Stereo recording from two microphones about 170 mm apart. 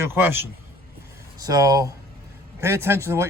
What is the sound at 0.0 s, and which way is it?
A man's voice, 15° right (ahead or behind).